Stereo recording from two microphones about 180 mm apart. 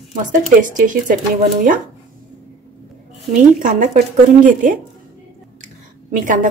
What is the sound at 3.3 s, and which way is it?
A woman's voice, 45° right (ahead or behind).